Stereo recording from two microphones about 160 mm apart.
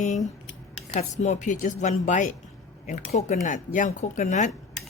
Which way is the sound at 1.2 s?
45° left (ahead or behind).